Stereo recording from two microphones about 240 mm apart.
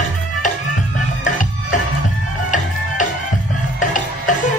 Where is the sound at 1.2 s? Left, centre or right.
Left.